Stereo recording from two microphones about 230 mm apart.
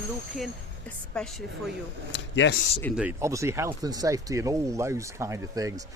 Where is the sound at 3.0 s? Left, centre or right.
Centre.